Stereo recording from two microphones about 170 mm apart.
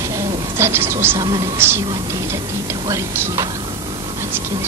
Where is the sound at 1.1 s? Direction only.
25° right (ahead or behind).